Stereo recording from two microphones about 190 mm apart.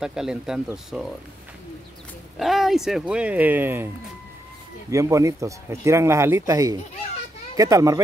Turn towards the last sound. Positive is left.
turn(degrees=-15)  # may be behind; listen again after turning